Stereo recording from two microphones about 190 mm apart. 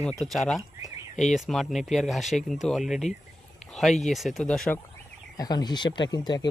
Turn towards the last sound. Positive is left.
turn(degrees=20)  # may be behind; listen again after turning